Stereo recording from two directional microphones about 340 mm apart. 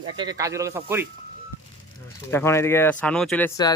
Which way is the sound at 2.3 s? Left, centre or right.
Centre.